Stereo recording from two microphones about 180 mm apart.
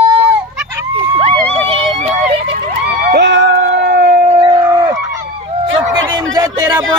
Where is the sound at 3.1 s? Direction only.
80° right.